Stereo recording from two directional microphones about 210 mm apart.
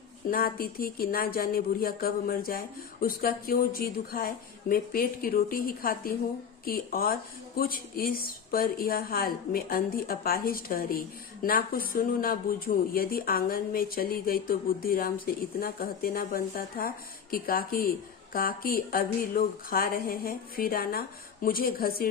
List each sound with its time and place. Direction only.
0.3 s speech: 45° left (ahead or behind)